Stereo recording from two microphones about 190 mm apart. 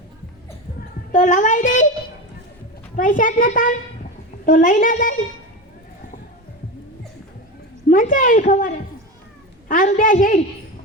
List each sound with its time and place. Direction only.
1.1 s a woman's voice: 40° left (ahead or behind)
2.9 s a woman's voice: 45° left (ahead or behind)
7.9 s a woman's voice: 45° left (ahead or behind)